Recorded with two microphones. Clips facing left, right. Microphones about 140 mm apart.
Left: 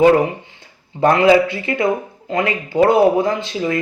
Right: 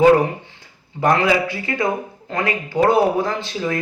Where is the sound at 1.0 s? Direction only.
25° left (ahead or behind).